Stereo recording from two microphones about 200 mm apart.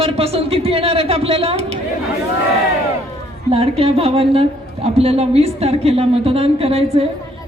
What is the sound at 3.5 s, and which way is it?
A man's voice, 30° right (ahead or behind).